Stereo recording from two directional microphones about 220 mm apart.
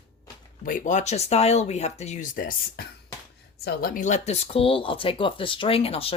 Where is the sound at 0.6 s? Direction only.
35° left (ahead or behind).